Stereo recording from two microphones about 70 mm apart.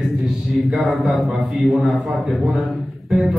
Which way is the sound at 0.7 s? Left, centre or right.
Centre.